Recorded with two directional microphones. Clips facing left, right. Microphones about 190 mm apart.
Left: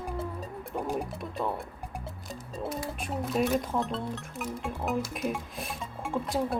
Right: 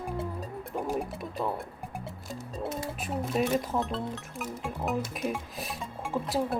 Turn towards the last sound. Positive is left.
turn(degrees=0)  # may be behind; listen again after turning